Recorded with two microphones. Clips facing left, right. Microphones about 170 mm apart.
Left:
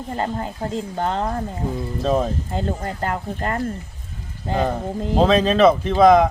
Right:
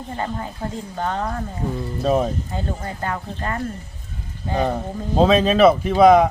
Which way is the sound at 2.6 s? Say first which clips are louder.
Left 3 dB; 35° left (ahead or behind).